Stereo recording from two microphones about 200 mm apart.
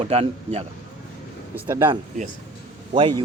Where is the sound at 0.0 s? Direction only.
30° right (ahead or behind).